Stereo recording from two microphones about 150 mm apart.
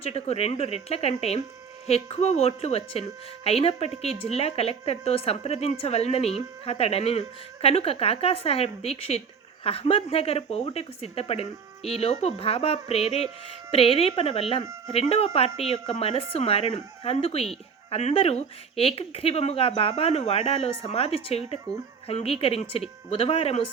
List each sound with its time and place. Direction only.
0.0 s a woman's voice: 45° left (ahead or behind)